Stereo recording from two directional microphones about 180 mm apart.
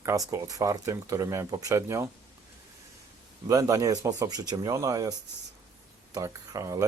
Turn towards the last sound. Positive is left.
turn(degrees=-20)  # may be behind; listen again after turning